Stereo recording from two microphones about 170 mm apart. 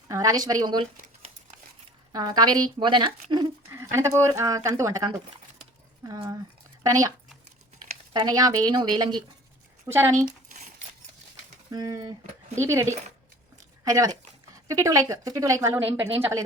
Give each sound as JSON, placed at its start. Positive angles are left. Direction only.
{"t": 0.1, "sound": "speech", "side_deg": -20}
{"t": 2.1, "sound": "speech", "side_deg": -25}
{"t": 3.9, "sound": "speech", "side_deg": -15}
{"t": 6.8, "sound": "speech", "side_deg": -20}
{"t": 8.1, "sound": "speech", "side_deg": -25}
{"t": 9.8, "sound": "speech", "side_deg": -15}
{"t": 10.2, "sound": "a sound", "side_deg": -50}
{"t": 11.7, "sound": "speech", "side_deg": -25}